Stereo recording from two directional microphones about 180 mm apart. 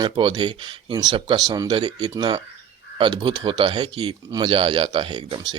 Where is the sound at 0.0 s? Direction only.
25° right (ahead or behind).